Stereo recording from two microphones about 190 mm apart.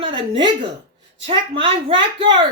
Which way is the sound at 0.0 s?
25° right (ahead or behind).